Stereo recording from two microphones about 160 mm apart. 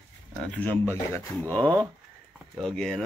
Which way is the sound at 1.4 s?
20° right (ahead or behind).